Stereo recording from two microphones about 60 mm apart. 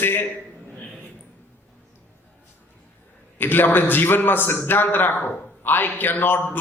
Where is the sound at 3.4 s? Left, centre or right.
Left.